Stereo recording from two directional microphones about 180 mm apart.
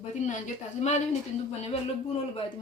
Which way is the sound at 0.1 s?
40° left (ahead or behind).